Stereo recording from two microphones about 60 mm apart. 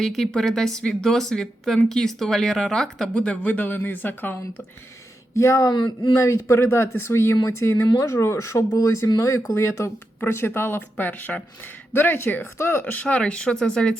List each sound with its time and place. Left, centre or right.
0.0 s a woman's voice: centre
3.2 s speech: left
5.3 s speech: left
10.2 s speech: left
12.8 s a woman's voice: left